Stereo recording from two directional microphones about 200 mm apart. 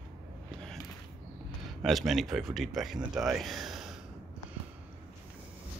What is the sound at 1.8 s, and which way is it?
A man's voice, centre (ahead or behind).